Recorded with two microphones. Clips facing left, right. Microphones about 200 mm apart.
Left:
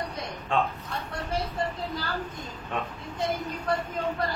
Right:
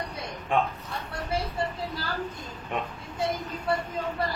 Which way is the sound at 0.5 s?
15° right (ahead or behind).